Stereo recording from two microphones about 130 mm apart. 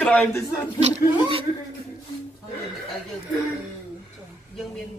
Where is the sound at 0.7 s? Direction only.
55° right (ahead or behind).